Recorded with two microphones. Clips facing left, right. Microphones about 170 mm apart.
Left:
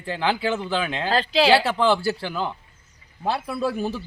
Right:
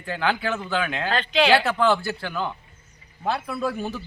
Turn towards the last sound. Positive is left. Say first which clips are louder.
# left 1 dB
turn(degrees=30)  # may be behind; listen again after turning